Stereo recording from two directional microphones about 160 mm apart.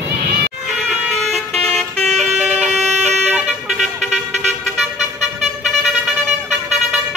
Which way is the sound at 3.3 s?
Centre (ahead or behind).